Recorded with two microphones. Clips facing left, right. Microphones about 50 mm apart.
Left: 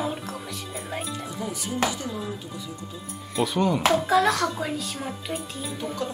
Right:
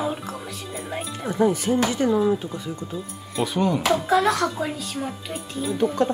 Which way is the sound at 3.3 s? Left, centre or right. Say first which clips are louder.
Right 1 dB; centre.